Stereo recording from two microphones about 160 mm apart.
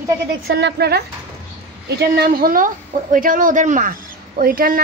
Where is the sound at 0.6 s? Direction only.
90° right.